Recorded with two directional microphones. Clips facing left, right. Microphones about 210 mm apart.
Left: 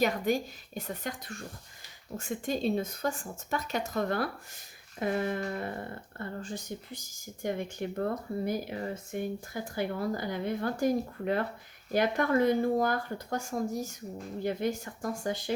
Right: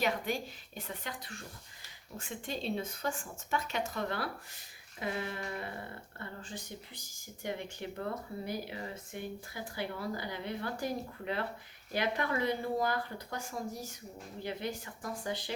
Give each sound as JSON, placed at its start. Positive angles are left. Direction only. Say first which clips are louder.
{"t": 0.0, "sound": "speech", "louder": "left 6 dB", "side_deg": 45}